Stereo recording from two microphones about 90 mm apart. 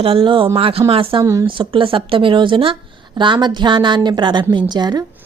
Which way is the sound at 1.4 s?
70° right (ahead or behind).